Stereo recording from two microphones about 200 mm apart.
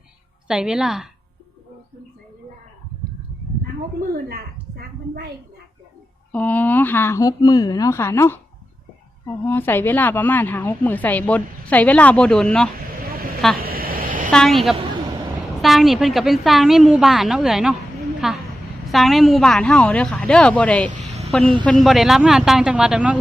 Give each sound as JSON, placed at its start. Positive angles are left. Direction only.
{"t": 0.4, "sound": "a woman's voice", "side_deg": -5}
{"t": 6.3, "sound": "speech", "side_deg": 5}
{"t": 13.1, "sound": "vehicle", "side_deg": -50}
{"t": 13.6, "sound": "a sound", "side_deg": -50}
{"t": 14.3, "sound": "a woman's voice", "side_deg": 0}